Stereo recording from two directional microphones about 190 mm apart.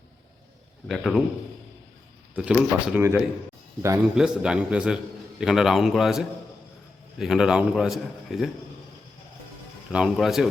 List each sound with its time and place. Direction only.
0.9 s a man's voice: centre (ahead or behind)
2.3 s a man's voice: 5° right (ahead or behind)
9.9 s a man's voice: 5° right (ahead or behind)